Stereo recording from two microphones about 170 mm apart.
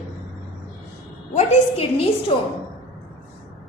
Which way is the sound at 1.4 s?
40° left (ahead or behind).